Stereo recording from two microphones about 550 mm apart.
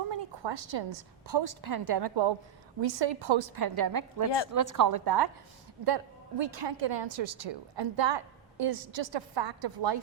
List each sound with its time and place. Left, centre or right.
0.1 s a woman's voice: right
3.6 s a woman's voice: right
4.9 s a woman's voice: right
6.4 s a woman's voice: right